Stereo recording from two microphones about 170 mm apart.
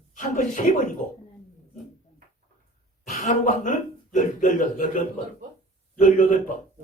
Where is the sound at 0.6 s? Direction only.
45° left (ahead or behind).